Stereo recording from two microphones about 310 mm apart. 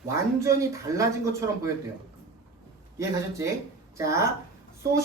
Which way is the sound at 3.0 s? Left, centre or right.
Centre.